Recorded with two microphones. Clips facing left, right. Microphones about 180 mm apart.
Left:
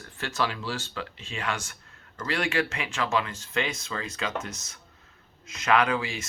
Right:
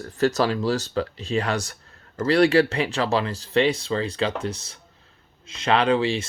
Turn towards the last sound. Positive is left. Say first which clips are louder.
# right 5 dB
turn(degrees=-30)  # may be behind; listen again after turning